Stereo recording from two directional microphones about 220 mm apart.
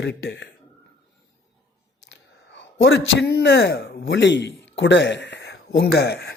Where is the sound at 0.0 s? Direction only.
50° left (ahead or behind).